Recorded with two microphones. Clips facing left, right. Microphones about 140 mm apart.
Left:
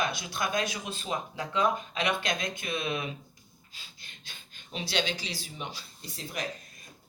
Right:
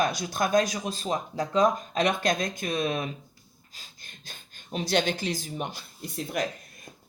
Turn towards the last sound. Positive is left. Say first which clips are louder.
# right 7 dB
turn(degrees=-55)  # may be behind; listen again after turning